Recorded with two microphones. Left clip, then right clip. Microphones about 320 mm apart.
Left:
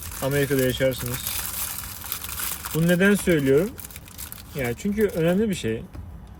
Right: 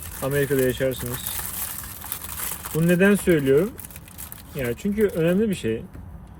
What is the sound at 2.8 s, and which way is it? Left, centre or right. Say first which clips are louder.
Speech: right 1 dB; centre.